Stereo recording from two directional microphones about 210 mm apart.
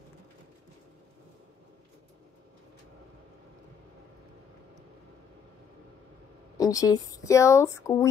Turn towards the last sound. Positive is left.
turn(degrees=15)  # may be behind; listen again after turning